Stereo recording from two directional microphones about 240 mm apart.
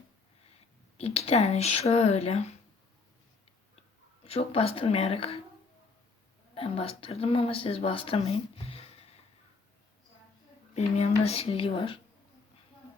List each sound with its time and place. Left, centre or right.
0.9 s speech: left
4.2 s speech: left
6.5 s speech: left
10.8 s speech: left